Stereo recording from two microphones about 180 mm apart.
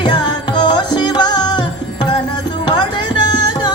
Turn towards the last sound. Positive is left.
turn(degrees=25)  # may be behind; listen again after turning